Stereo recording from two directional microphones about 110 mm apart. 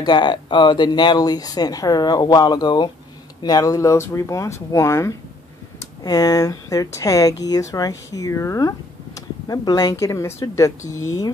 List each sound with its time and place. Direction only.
0.0 s speech: 45° left (ahead or behind); by 5.1 s 25° left (ahead or behind)
6.0 s speech: 35° left (ahead or behind)